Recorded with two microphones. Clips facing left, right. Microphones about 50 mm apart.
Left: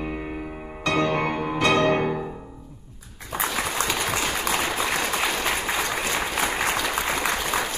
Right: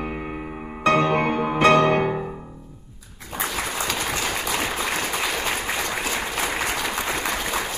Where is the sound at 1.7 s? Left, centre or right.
Centre.